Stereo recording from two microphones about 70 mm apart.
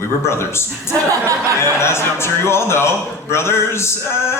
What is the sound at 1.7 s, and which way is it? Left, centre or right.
Speech, left.